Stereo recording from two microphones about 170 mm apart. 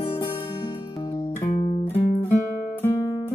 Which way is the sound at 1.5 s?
40° left (ahead or behind).